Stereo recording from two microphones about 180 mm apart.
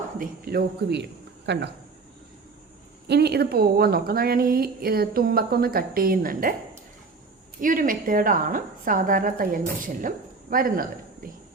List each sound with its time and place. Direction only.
0.2 s a woman's voice: 60° right (ahead or behind)
3.1 s a woman's voice: 65° right (ahead or behind)
7.6 s a woman's voice: 50° right (ahead or behind)